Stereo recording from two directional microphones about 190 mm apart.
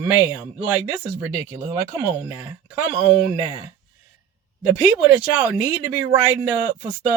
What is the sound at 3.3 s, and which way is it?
Speech, 20° right (ahead or behind).